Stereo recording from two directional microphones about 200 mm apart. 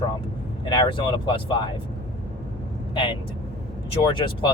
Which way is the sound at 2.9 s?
25° left (ahead or behind).